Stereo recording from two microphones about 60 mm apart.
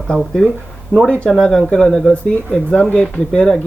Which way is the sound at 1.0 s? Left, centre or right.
Left.